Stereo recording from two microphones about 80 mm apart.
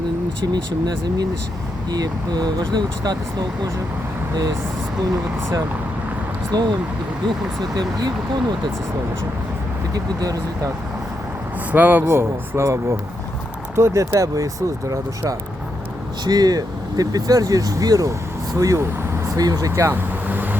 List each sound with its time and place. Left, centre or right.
0.5 s speech: right
6.5 s speech: right
9.9 s speech: right
11.7 s speech: right
16.2 s speech: right
20.2 s vehicle: right